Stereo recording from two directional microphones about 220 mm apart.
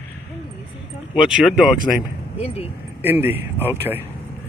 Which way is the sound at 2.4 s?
25° left (ahead or behind).